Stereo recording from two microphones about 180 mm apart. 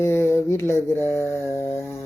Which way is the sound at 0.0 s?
15° left (ahead or behind).